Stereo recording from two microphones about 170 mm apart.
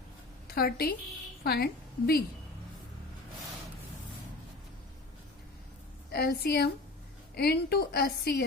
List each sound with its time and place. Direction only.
0.4 s a woman's voice: 65° left (ahead or behind)
6.1 s a woman's voice: 65° left (ahead or behind)